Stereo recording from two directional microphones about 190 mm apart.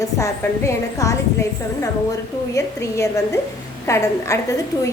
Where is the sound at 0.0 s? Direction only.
15° left (ahead or behind).